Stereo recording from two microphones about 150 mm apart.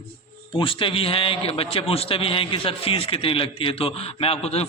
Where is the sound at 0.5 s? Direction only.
35° left (ahead or behind).